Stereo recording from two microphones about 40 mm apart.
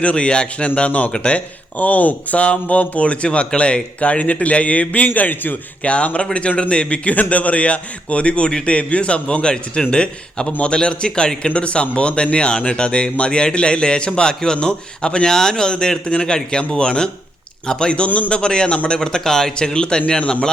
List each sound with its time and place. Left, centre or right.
0.0 s speech: left
1.8 s speech: left
5.0 s a man's voice: left
5.8 s speech: left
18.0 s speech: left
18.3 s speech: left